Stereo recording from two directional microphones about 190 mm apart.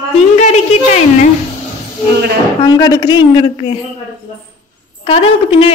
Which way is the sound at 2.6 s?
20° left (ahead or behind).